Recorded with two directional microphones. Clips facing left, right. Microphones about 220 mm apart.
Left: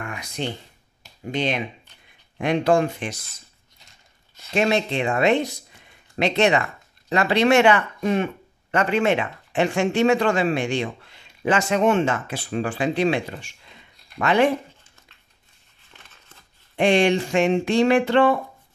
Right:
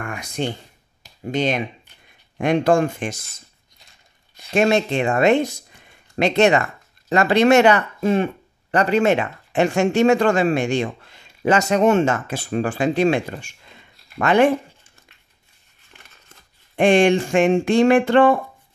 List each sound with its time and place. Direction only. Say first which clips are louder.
0.0 s a sound: right 4 dB; 50° right (ahead or behind)
2.3 s speech: right 2 dB; 45° right (ahead or behind)
4.6 s speech: right 4 dB; 45° right (ahead or behind)
16.7 s speech: right 3 dB; 50° right (ahead or behind)